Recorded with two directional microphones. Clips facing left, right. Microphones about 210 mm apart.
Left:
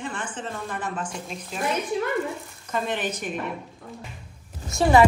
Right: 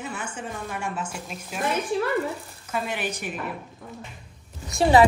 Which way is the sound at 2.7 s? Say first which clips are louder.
Left 2 dB; 10° right (ahead or behind).